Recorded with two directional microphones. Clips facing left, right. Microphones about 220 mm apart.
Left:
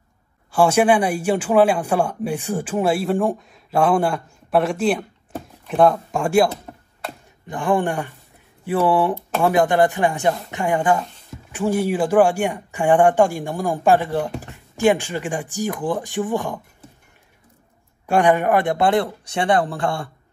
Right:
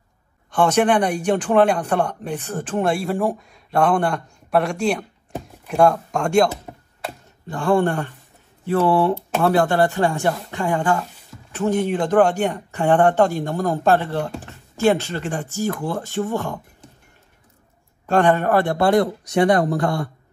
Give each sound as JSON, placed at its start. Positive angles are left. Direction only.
{"t": 0.5, "sound": "speech", "side_deg": 10}
{"t": 7.4, "sound": "speech", "side_deg": 15}
{"t": 18.0, "sound": "speech", "side_deg": 15}